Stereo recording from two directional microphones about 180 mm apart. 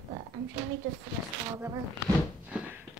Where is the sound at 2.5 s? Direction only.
5° right (ahead or behind).